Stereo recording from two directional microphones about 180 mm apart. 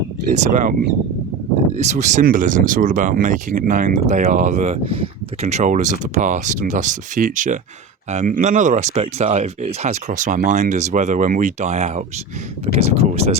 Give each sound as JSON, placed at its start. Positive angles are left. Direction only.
{"t": 0.3, "sound": "speech", "side_deg": -40}
{"t": 1.7, "sound": "speech", "side_deg": -40}